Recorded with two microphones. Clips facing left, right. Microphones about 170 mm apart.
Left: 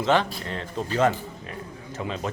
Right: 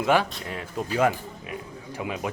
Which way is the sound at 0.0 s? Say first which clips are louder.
Even; 10° right (ahead or behind).